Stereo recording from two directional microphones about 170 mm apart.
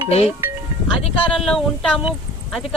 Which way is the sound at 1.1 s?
5° left (ahead or behind).